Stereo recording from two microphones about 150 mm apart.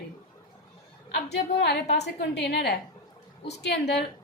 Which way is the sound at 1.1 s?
90° left.